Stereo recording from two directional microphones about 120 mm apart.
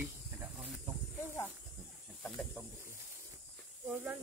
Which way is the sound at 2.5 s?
20° right (ahead or behind).